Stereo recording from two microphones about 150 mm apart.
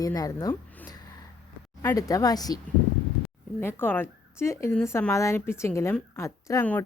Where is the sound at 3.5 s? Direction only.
15° left (ahead or behind).